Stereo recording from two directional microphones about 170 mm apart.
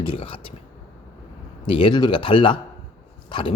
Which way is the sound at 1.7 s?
30° left (ahead or behind).